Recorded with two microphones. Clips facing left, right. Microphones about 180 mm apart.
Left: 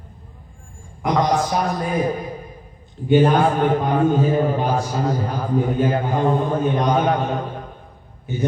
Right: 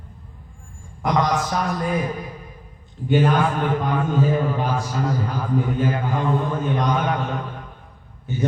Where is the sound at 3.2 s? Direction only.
35° left (ahead or behind).